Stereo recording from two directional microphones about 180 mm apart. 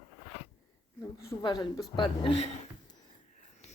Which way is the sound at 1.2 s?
20° left (ahead or behind).